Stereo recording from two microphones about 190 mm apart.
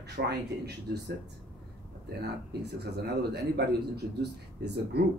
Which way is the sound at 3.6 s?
60° right (ahead or behind).